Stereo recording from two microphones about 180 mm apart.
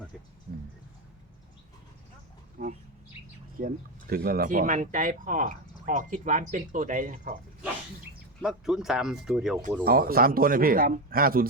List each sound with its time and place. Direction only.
0.5 s music: 60° right (ahead or behind)
2.6 s bird: 55° right (ahead or behind)
3.6 s speech: 55° right (ahead or behind)
8.4 s speech: centre (ahead or behind)
9.8 s speech: 55° right (ahead or behind)